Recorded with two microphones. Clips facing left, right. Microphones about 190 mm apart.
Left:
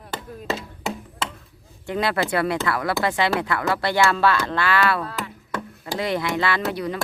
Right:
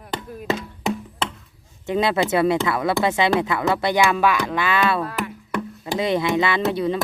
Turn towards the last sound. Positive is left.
turn(degrees=-25)  # may be behind; listen again after turning